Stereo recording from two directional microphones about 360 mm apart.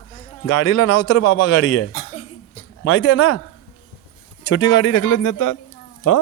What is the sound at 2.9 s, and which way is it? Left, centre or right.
Speech, left.